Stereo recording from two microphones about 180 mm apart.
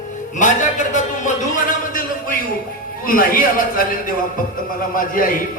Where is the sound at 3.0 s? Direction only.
50° left (ahead or behind).